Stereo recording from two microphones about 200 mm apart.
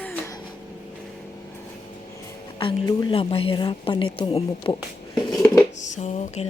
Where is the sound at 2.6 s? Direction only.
20° left (ahead or behind).